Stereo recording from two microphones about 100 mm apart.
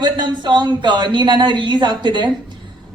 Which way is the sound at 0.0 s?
50° right (ahead or behind).